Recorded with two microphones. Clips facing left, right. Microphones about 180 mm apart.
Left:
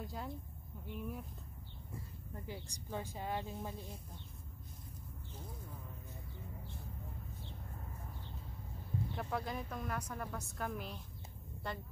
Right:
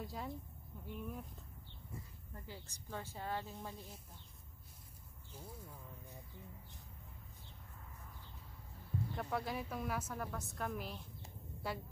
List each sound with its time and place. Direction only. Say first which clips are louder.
0.0 s a woman's voice: even; centre (ahead or behind)
0.7 s a sound: left 1 dB; 5° left (ahead or behind)
2.4 s speech: left 5 dB; 15° left (ahead or behind)
9.1 s a woman's voice: right 1 dB; centre (ahead or behind)